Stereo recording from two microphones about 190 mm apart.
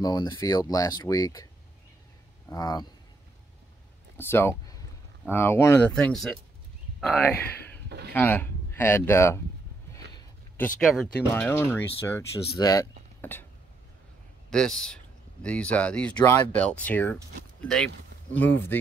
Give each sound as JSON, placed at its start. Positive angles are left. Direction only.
{"t": 0.0, "sound": "speech", "side_deg": 20}
{"t": 2.5, "sound": "speech", "side_deg": 20}
{"t": 4.2, "sound": "speech", "side_deg": 10}
{"t": 10.6, "sound": "speech", "side_deg": 0}
{"t": 14.5, "sound": "a man's voice", "side_deg": 5}